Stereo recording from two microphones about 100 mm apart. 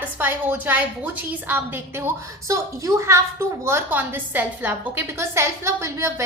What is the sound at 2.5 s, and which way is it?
A woman's voice, 35° right (ahead or behind).